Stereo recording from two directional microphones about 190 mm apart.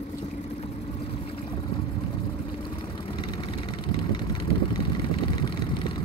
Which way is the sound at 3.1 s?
25° left (ahead or behind).